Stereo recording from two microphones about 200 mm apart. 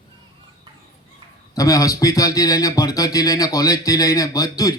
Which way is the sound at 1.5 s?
15° left (ahead or behind).